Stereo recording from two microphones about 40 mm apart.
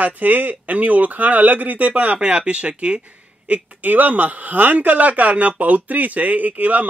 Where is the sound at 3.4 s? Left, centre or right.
Right.